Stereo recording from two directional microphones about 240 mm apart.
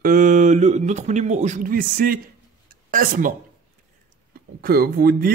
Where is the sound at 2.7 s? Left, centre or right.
Right.